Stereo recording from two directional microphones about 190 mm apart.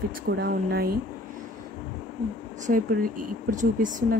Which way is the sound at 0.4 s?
55° right (ahead or behind).